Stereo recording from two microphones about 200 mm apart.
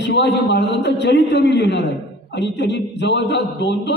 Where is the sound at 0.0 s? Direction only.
60° left (ahead or behind).